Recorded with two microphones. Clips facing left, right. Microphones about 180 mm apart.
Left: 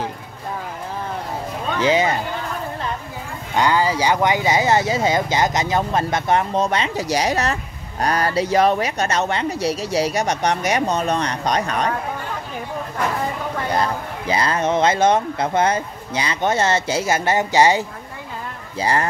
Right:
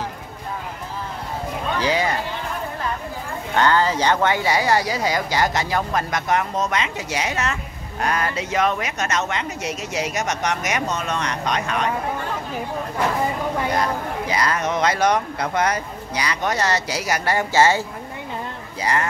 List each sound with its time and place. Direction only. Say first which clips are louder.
1.8 s speech: left 5 dB; 20° left (ahead or behind)
3.5 s speech: even; 10° left (ahead or behind); by 11.9 s 35° left (ahead or behind)
13.7 s speech: even; 30° left (ahead or behind)
18.8 s speech: left 3 dB; 30° left (ahead or behind)